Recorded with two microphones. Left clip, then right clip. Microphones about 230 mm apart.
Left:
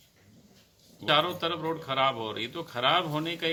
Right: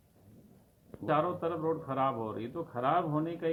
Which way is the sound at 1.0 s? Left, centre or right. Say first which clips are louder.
Left 5 dB; centre.